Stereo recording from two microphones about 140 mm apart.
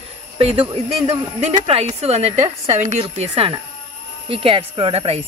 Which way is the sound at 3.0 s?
40° right (ahead or behind).